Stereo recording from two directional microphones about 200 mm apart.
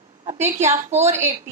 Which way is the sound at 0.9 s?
35° right (ahead or behind).